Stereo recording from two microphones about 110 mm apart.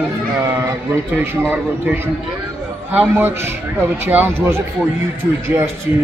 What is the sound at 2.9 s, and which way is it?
A man's voice, 15° right (ahead or behind).